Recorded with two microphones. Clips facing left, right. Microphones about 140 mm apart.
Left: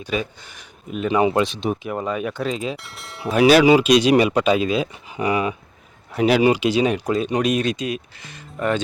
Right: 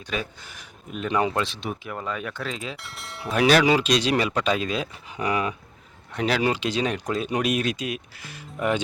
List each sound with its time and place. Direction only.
0.0 s speech: 5° left (ahead or behind)
1.4 s speech: 15° left (ahead or behind)
2.7 s speech: centre (ahead or behind)